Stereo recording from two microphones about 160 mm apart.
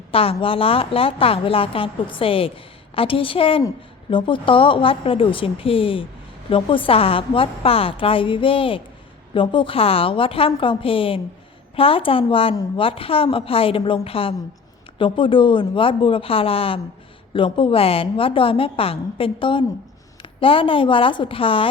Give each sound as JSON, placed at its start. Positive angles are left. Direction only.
{"t": 0.1, "sound": "a woman's voice", "side_deg": 35}